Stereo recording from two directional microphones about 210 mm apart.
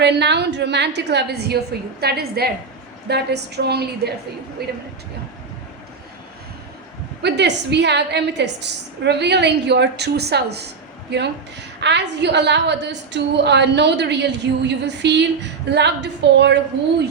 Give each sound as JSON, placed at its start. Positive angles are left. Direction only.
{"t": 0.0, "sound": "a woman's voice", "side_deg": -55}
{"t": 7.2, "sound": "a woman's voice", "side_deg": -55}